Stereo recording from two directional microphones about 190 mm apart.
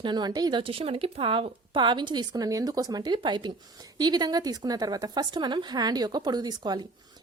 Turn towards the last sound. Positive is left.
turn(degrees=-20)  # may be behind; listen again after turning